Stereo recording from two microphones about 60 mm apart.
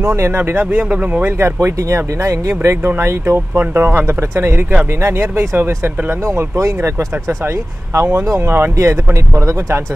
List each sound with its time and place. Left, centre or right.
0.0 s speech: right
1.4 s speech: right
5.0 s speech: right
7.9 s speech: right